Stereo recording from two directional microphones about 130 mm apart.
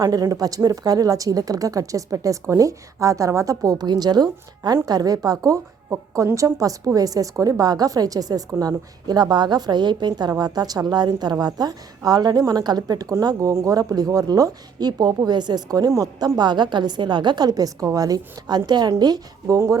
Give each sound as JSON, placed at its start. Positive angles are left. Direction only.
{"t": 0.0, "sound": "a woman's voice", "side_deg": -25}